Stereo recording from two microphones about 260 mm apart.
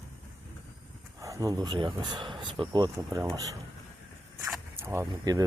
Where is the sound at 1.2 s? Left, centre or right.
Centre.